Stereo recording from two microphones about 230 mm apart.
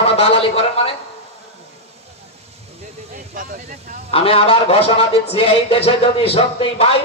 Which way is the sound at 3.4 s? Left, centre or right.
Right.